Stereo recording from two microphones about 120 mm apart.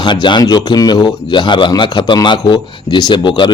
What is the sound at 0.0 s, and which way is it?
Speech, 40° left (ahead or behind).